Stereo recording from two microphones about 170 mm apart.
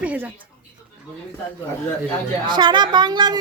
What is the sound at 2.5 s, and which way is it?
Speech, 25° right (ahead or behind).